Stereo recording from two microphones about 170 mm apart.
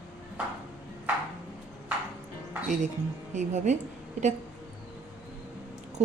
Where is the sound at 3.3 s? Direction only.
45° right (ahead or behind).